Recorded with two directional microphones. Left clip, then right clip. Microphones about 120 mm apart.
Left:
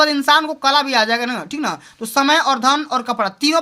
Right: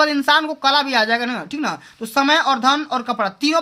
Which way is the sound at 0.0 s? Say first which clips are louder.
Left 2 dB; 20° left (ahead or behind).